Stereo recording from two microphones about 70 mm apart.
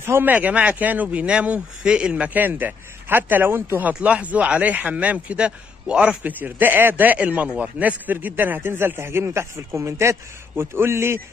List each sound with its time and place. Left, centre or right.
0.0 s speech: right
3.9 s a man's voice: centre; by 11.1 s right